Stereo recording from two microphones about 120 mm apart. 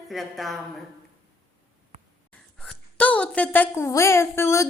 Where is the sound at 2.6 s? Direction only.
10° left (ahead or behind).